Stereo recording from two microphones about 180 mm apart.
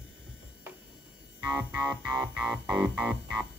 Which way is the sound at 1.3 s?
15° right (ahead or behind).